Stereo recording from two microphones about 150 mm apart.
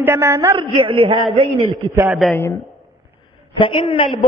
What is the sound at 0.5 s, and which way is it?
Speech, 35° right (ahead or behind).